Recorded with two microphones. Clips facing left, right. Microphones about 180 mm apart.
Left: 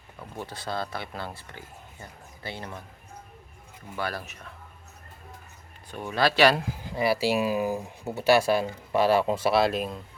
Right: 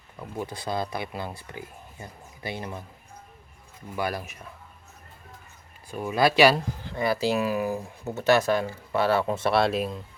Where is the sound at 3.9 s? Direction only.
15° right (ahead or behind).